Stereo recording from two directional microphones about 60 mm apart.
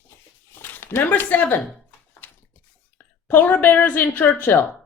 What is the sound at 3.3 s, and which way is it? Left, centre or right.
Speech, left.